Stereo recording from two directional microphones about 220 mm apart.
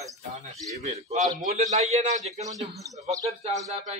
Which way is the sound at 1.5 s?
30° right (ahead or behind).